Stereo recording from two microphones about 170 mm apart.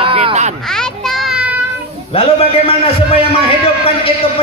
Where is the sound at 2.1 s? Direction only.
35° left (ahead or behind).